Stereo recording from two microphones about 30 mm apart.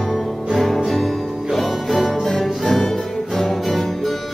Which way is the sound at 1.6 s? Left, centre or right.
Centre.